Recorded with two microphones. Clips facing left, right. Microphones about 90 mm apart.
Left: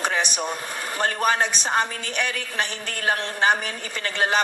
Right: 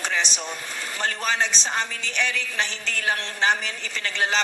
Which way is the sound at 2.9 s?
40° left (ahead or behind).